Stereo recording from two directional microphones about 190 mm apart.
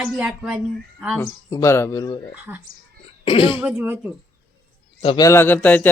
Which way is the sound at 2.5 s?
10° right (ahead or behind).